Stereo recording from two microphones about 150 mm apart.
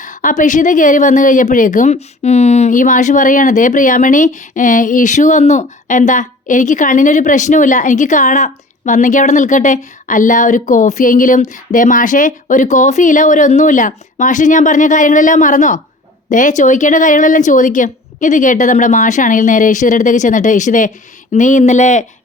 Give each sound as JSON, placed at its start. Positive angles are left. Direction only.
{"t": 0.0, "sound": "speech", "side_deg": 60}